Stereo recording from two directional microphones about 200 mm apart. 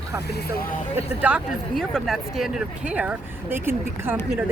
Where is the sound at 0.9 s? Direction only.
5° right (ahead or behind).